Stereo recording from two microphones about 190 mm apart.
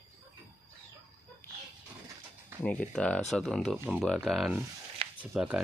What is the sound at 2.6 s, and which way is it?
Speech, 5° left (ahead or behind).